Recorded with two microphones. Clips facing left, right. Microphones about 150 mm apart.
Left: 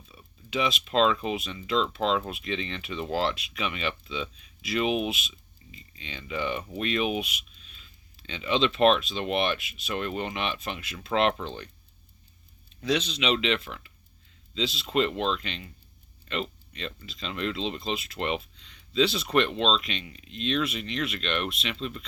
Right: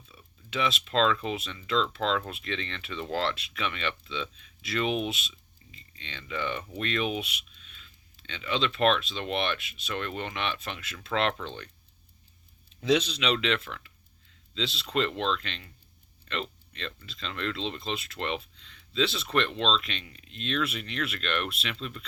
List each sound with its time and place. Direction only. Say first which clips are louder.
0.1 s a sound: left 4 dB; 10° left (ahead or behind)
1.2 s speech: left 2 dB; 10° left (ahead or behind)
8.4 s speech: left 4 dB; 20° left (ahead or behind)
9.1 s speech: left 3 dB; 5° left (ahead or behind)
13.0 s speech: left 1 dB; 5° left (ahead or behind)